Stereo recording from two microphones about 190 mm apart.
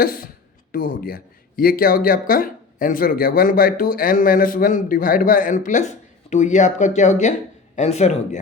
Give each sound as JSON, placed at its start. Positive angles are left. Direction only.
{"t": 0.0, "sound": "a man's voice", "side_deg": 50}